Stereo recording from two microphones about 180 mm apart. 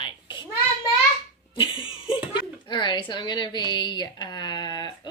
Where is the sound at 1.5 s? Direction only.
30° left (ahead or behind).